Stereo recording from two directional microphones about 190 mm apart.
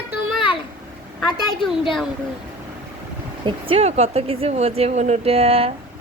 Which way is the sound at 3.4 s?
30° right (ahead or behind).